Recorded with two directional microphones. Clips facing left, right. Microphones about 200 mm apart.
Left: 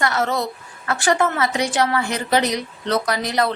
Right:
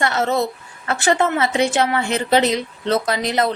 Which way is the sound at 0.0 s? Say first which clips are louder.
Right 2 dB; 25° right (ahead or behind).